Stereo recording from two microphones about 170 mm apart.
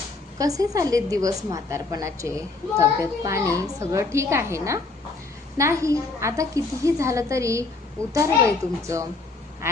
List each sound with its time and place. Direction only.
0.3 s a woman's voice: 20° right (ahead or behind)